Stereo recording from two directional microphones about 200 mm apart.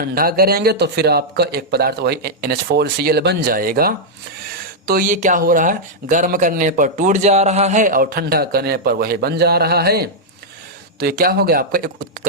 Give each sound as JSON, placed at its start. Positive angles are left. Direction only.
{"t": 0.0, "sound": "speech", "side_deg": -50}